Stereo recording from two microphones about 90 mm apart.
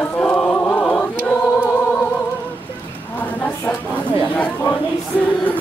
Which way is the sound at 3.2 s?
15° left (ahead or behind).